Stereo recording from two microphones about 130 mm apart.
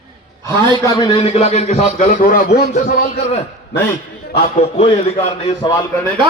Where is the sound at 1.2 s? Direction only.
55° left (ahead or behind); by 2.9 s 80° left.